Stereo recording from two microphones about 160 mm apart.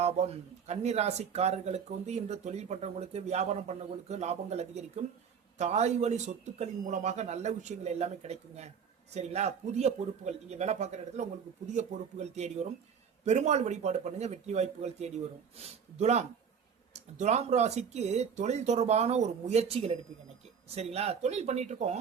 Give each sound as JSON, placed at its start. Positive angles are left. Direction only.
{"t": 0.0, "sound": "speech", "side_deg": -40}